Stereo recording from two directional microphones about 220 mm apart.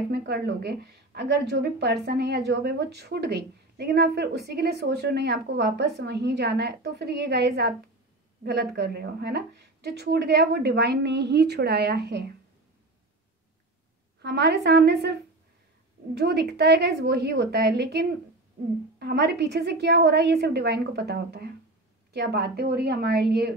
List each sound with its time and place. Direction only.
0.1 s a woman's voice: 50° right (ahead or behind)
14.2 s a woman's voice: 50° right (ahead or behind)
16.2 s a woman's voice: 50° right (ahead or behind)